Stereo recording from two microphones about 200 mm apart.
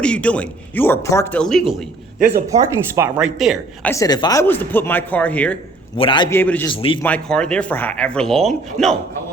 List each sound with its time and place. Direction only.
0.0 s speech: 5° left (ahead or behind)
2.3 s speech: 15° right (ahead or behind)
3.9 s speech: 20° left (ahead or behind)
6.0 s a man's voice: 25° left (ahead or behind)
6.3 s speech: 10° left (ahead or behind)
6.7 s a man's voice: 25° left (ahead or behind)
7.0 s speech: 5° left (ahead or behind)